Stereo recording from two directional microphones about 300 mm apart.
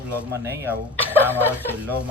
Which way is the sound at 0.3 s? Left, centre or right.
Centre.